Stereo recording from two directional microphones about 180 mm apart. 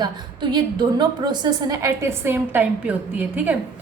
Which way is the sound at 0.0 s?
25° right (ahead or behind).